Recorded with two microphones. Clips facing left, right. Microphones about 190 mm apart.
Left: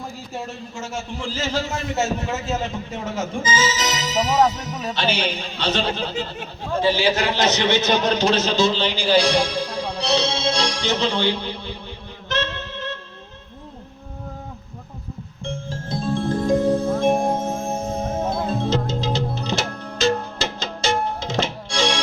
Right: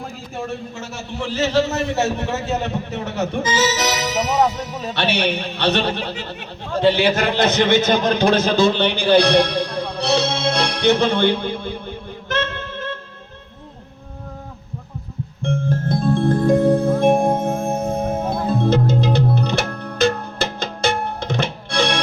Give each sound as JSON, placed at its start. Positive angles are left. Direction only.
{"t": 1.2, "sound": "a man's voice", "side_deg": -70}
{"t": 15.4, "sound": "music", "side_deg": -60}